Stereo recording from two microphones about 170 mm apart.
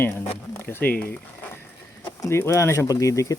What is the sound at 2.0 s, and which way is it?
Speech, 15° left (ahead or behind).